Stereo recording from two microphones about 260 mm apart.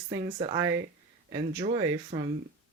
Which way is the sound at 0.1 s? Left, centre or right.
Centre.